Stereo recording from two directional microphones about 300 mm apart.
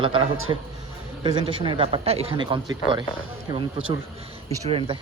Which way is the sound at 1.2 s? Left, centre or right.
Centre.